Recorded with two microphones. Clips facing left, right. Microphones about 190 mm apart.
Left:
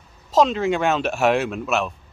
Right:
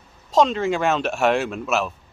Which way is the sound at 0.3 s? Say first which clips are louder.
Even; centre (ahead or behind).